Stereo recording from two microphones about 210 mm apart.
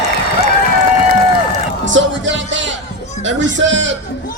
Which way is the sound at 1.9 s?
60° right (ahead or behind).